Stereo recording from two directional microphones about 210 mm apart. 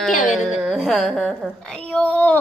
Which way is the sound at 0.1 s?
40° left (ahead or behind).